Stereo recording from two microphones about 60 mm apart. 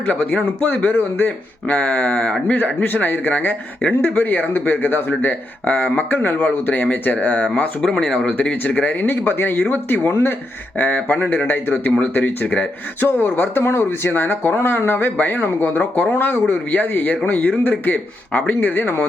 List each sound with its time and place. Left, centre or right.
0.0 s speech: left
7.8 s speech: centre
8.3 s speech: left
11.7 s speech: left